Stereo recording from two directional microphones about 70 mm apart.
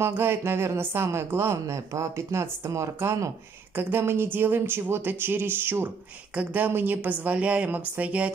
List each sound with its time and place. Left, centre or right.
0.0 s a woman's voice: right